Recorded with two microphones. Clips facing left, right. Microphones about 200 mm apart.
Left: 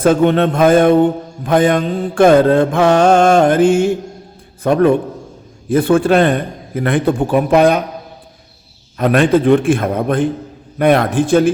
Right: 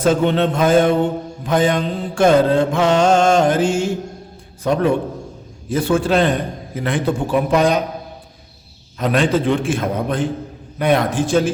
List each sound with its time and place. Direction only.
0.0 s mantra: 55° left (ahead or behind)
9.0 s mantra: 55° left (ahead or behind)